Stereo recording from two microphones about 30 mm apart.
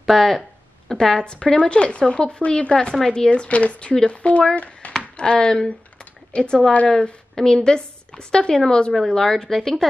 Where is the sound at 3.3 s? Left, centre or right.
Left.